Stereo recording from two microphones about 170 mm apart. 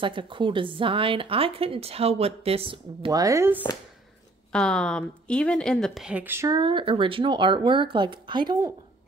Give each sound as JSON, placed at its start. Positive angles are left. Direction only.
{"t": 0.0, "sound": "a woman's voice", "side_deg": -30}
{"t": 4.5, "sound": "a woman's voice", "side_deg": 5}